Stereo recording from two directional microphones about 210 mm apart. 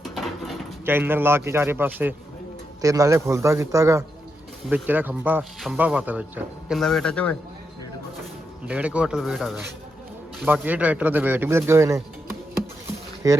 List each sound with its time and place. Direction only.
0.0 s mechanisms: centre (ahead or behind)
0.9 s speech: 10° right (ahead or behind)
8.6 s speech: 5° right (ahead or behind)
13.2 s speech: 15° right (ahead or behind)